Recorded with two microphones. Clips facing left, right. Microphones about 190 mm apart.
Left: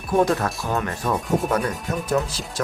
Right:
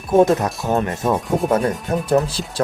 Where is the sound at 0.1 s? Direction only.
25° right (ahead or behind).